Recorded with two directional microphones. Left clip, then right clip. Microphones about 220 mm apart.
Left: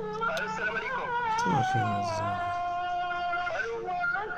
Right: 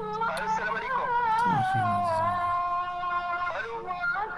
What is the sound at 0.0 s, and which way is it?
Music, 25° right (ahead or behind).